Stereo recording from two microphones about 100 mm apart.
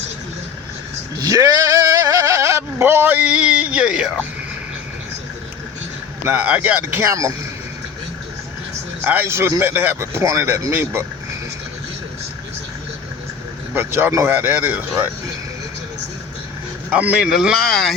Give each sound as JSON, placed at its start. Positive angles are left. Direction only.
{"t": 1.2, "sound": "a sound", "side_deg": -35}
{"t": 6.2, "sound": "speech", "side_deg": -15}
{"t": 7.0, "sound": "a man's voice", "side_deg": -30}
{"t": 9.0, "sound": "a man's voice", "side_deg": -25}
{"t": 13.7, "sound": "a man's voice", "side_deg": -25}
{"t": 16.9, "sound": "speech", "side_deg": -15}